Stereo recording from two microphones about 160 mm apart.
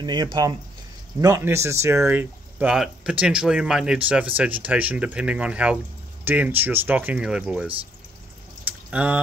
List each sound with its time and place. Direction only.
0.0 s speech: 25° right (ahead or behind); by 7.7 s 5° right (ahead or behind)
8.9 s speech: 10° right (ahead or behind)